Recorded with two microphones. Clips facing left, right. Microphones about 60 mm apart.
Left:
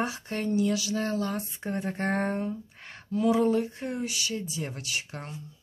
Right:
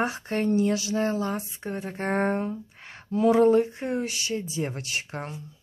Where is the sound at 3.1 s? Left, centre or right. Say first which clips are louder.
Right 5 dB; right.